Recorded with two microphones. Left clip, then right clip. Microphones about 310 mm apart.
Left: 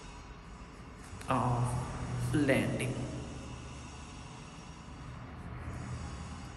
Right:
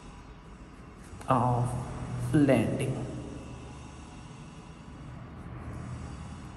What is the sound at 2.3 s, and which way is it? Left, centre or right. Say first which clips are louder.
Mantra: right 7 dB; centre.